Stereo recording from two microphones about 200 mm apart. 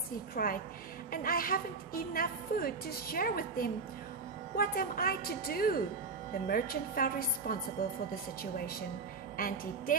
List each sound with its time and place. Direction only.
0.4 s a woman's voice: 50° left (ahead or behind)